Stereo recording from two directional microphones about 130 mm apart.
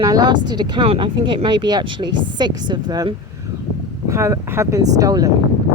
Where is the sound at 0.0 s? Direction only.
35° right (ahead or behind).